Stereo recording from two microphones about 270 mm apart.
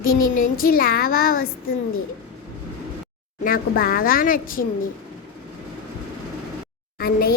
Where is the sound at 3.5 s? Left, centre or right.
Left.